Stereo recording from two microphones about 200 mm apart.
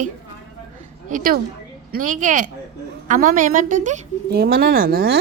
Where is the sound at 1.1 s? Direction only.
45° right (ahead or behind).